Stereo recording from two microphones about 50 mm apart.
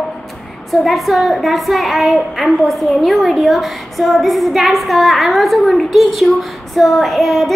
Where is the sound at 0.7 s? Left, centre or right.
Centre.